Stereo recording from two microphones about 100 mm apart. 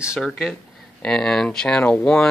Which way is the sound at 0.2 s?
5° left (ahead or behind).